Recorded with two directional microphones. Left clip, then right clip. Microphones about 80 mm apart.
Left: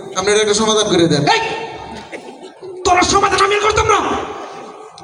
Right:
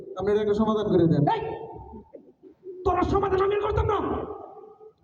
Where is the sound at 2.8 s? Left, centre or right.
Right.